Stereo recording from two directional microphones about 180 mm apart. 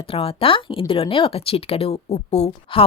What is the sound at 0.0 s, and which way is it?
A woman's voice, 30° left (ahead or behind).